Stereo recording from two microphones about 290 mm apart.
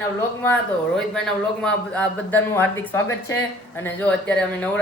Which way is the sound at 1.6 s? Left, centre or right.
Centre.